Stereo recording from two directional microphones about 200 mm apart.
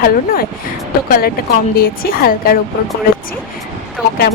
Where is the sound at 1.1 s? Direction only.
45° left (ahead or behind).